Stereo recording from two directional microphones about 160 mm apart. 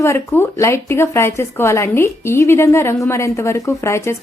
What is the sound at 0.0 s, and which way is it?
Speech, 15° left (ahead or behind).